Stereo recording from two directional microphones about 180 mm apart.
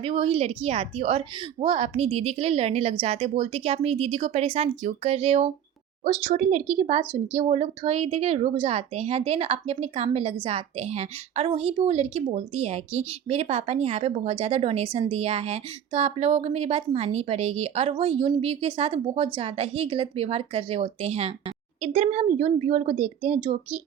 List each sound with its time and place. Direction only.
0.0 s a woman's voice: 30° right (ahead or behind)